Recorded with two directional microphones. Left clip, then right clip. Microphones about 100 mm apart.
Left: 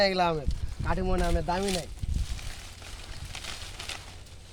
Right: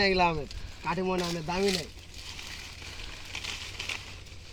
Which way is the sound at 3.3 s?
40° left (ahead or behind).